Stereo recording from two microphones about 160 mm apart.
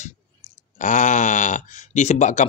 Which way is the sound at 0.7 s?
50° left (ahead or behind).